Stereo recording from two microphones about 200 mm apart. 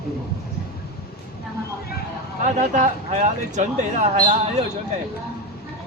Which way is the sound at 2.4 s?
40° right (ahead or behind).